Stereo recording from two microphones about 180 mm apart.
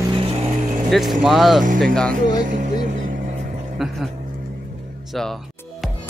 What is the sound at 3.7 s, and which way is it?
Speech, centre (ahead or behind).